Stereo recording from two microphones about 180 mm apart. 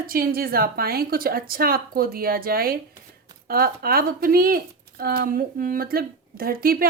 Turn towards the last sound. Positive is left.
turn(degrees=-55)  # may be behind; listen again after turning